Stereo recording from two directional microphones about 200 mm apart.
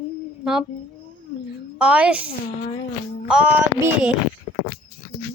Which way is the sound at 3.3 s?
5° right (ahead or behind).